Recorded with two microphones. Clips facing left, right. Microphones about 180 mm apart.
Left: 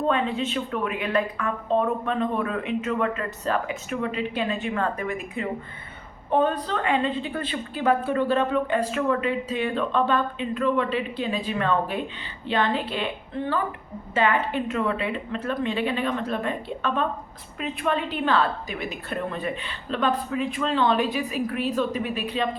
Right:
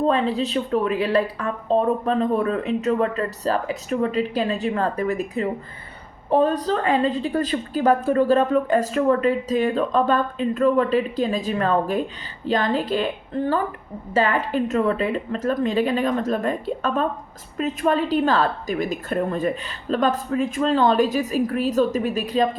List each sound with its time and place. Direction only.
0.1 s a woman's voice: 35° right (ahead or behind)